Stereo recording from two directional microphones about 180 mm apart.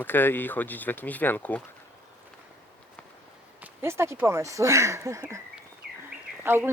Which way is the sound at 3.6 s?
15° right (ahead or behind).